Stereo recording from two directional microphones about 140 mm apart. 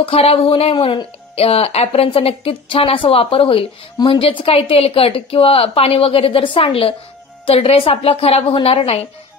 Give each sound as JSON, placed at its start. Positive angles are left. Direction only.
{"t": 0.0, "sound": "speech", "side_deg": 45}